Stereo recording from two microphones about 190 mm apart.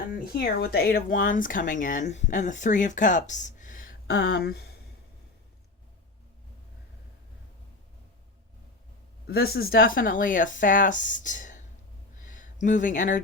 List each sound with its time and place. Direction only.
0.1 s speech: 55° left (ahead or behind)
4.0 s speech: 60° left (ahead or behind)
9.2 s speech: 55° left (ahead or behind)
12.1 s a sound: 45° left (ahead or behind)